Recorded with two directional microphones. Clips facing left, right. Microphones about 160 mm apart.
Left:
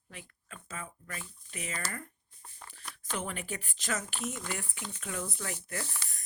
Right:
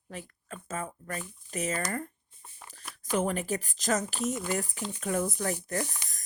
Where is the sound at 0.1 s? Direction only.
40° right (ahead or behind).